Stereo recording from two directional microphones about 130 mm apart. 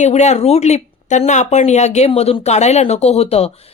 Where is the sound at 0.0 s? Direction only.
60° left (ahead or behind).